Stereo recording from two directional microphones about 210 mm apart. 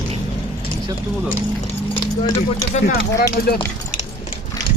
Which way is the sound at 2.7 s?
40° left (ahead or behind).